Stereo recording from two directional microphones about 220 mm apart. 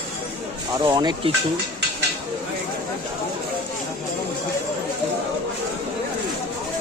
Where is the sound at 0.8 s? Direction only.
20° right (ahead or behind).